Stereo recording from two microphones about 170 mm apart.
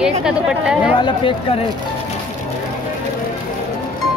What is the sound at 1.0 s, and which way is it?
Speech, 30° left (ahead or behind).